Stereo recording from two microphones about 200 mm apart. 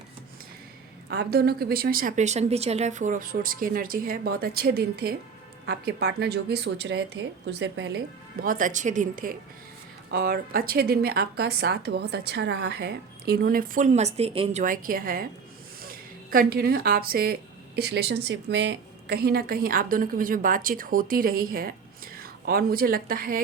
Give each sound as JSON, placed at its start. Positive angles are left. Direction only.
{"t": 1.1, "sound": "a woman's voice", "side_deg": -55}
{"t": 14.6, "sound": "a woman's voice", "side_deg": -45}